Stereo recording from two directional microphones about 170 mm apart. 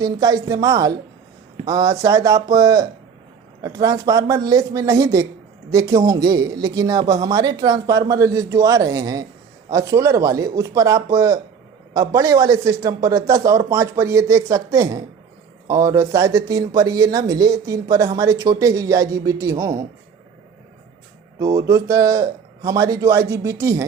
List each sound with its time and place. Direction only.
0.0 s speech: 20° right (ahead or behind)
21.3 s speech: 15° right (ahead or behind)